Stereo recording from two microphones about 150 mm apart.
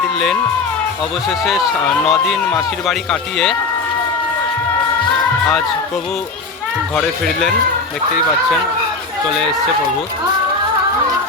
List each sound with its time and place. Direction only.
2.0 s speech: centre (ahead or behind)